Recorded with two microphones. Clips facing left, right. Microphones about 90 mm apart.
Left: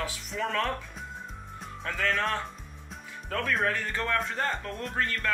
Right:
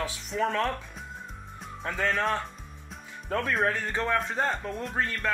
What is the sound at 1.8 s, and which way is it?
Speech, 15° right (ahead or behind).